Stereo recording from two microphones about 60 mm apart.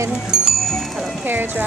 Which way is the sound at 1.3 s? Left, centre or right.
Right.